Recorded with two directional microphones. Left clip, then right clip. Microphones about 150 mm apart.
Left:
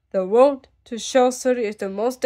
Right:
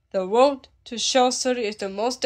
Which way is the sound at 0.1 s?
45° left (ahead or behind).